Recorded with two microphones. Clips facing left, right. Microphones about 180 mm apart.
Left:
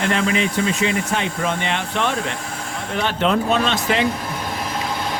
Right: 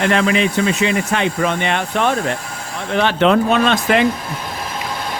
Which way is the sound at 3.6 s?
55° right (ahead or behind).